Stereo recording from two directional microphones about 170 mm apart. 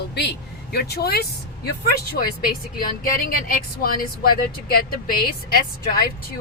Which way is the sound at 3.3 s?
60° left (ahead or behind).